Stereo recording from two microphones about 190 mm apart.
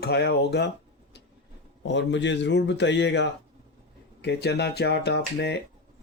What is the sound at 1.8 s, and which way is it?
A man's voice, 70° left (ahead or behind).